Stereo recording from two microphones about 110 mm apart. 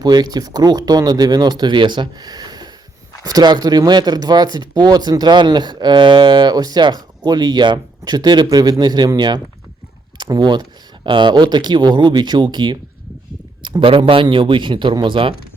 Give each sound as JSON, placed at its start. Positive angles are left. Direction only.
{"t": 0.0, "sound": "speech", "side_deg": -35}